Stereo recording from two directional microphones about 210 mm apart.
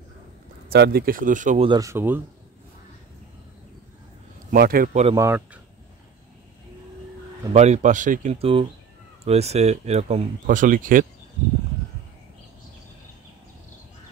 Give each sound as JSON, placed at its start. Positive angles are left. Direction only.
{"t": 0.7, "sound": "speech", "side_deg": -50}
{"t": 1.7, "sound": "speech", "side_deg": -15}
{"t": 4.5, "sound": "a man's voice", "side_deg": -45}
{"t": 5.1, "sound": "speech", "side_deg": -10}
{"t": 7.5, "sound": "speech", "side_deg": -30}